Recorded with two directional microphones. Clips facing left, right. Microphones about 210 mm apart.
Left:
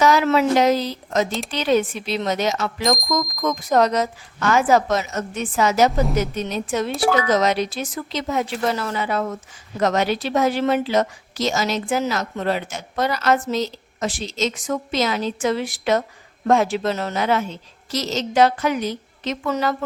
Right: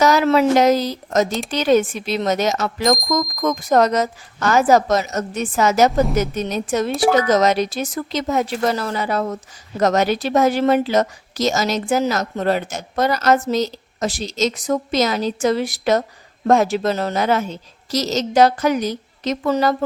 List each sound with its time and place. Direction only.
0.0 s a woman's voice: 40° right (ahead or behind)